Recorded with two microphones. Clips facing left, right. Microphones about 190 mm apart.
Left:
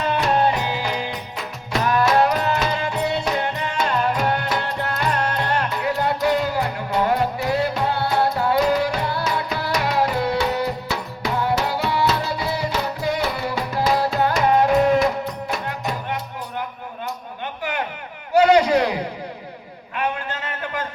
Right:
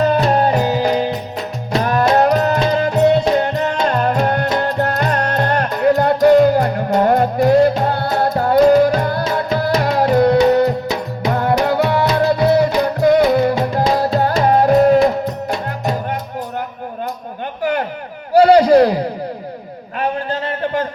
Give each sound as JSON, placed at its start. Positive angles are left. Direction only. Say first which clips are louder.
{"t": 0.0, "sound": "music", "louder": "right 5 dB", "side_deg": -40}
{"t": 10.8, "sound": "music", "louder": "right 6 dB", "side_deg": -20}
{"t": 11.3, "sound": "music", "louder": "right 6 dB", "side_deg": -50}
{"t": 17.6, "sound": "a sound", "louder": "right 9 dB", "side_deg": -40}